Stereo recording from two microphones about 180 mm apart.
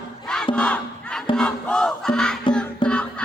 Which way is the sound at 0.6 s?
5° left (ahead or behind).